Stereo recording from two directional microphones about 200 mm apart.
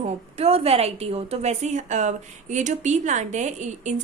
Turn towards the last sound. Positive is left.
turn(degrees=-35)  # may be behind; listen again after turning